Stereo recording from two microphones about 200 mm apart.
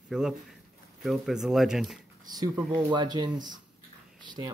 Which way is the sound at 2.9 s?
20° right (ahead or behind).